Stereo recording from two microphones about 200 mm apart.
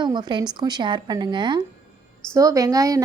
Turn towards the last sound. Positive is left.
turn(degrees=-15)  # may be behind; listen again after turning